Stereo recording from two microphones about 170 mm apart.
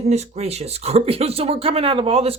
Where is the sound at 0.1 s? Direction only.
40° right (ahead or behind).